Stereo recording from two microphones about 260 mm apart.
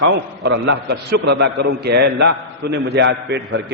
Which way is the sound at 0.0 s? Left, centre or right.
Right.